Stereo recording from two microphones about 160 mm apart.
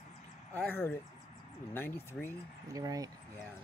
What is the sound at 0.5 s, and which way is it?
Speech, 15° left (ahead or behind).